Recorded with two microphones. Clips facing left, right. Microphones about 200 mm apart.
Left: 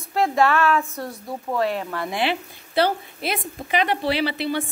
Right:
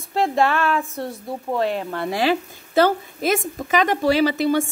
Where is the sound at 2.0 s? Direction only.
40° right (ahead or behind).